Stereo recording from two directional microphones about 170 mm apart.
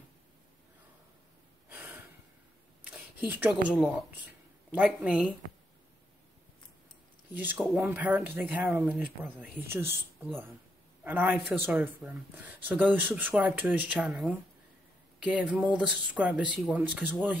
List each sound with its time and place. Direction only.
1.7 s gasp: 10° right (ahead or behind)
2.8 s speech: 10° right (ahead or behind)
7.3 s speech: 10° right (ahead or behind)
11.1 s speech: 5° right (ahead or behind)